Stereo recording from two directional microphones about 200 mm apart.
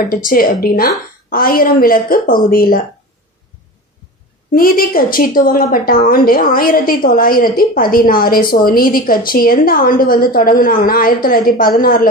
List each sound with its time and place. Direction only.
0.1 s a woman's voice: 45° left (ahead or behind)
4.6 s a woman's voice: 45° left (ahead or behind)